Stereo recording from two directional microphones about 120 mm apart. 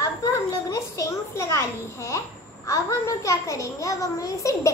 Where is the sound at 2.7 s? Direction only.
25° left (ahead or behind).